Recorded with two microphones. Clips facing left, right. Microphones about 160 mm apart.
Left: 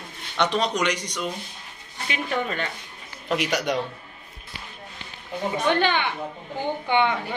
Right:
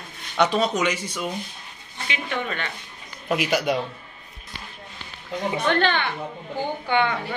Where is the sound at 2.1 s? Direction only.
35° left (ahead or behind).